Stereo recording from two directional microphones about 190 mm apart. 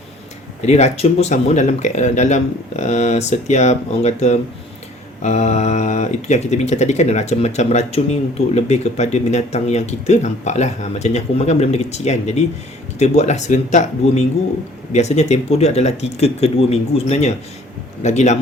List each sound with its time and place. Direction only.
0.6 s speech: 35° left (ahead or behind)